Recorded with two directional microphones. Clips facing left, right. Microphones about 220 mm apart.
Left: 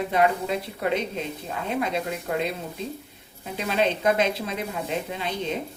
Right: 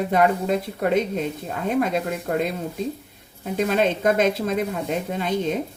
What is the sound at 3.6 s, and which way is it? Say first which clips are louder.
A woman's voice: right 4 dB; 45° right (ahead or behind).